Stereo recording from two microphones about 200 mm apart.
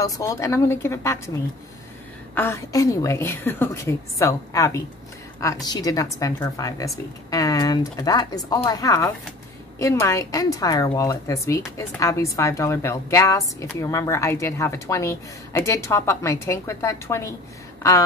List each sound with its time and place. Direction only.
0.0 s a woman's voice: 15° left (ahead or behind)
2.3 s a woman's voice: 10° left (ahead or behind)